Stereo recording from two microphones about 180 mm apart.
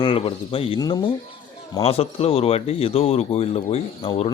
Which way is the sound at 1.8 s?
35° left (ahead or behind).